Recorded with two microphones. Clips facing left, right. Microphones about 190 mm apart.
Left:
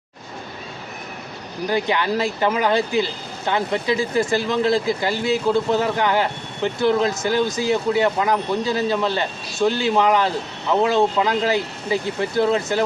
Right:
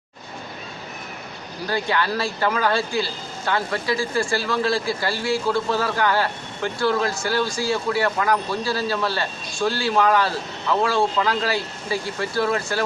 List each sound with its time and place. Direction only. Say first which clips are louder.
1.6 s speech: left 3 dB; 15° left (ahead or behind)